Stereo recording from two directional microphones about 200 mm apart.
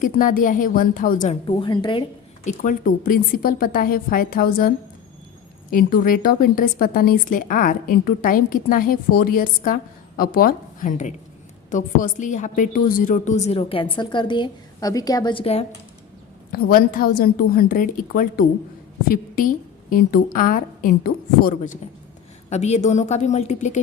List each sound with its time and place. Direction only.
0.0 s a woman's voice: 40° left (ahead or behind)
1.5 s a woman's voice: 25° left (ahead or behind)
2.5 s a woman's voice: 40° left (ahead or behind)
5.7 s a woman's voice: 45° left (ahead or behind); by 15.6 s 30° left (ahead or behind)
16.5 s a woman's voice: 50° left (ahead or behind)